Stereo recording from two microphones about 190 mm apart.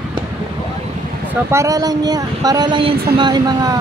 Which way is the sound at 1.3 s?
15° right (ahead or behind).